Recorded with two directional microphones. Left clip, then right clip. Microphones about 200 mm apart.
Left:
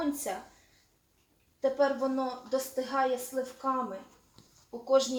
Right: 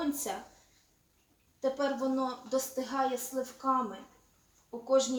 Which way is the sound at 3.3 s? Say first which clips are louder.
Left 2 dB; 50° right (ahead or behind).